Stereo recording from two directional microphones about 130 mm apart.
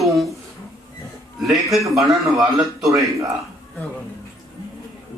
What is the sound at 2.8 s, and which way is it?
Speech, 25° right (ahead or behind).